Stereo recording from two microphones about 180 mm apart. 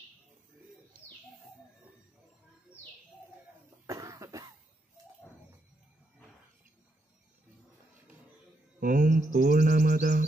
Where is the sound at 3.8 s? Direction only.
20° right (ahead or behind).